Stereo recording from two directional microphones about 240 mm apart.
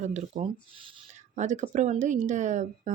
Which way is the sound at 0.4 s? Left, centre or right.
Right.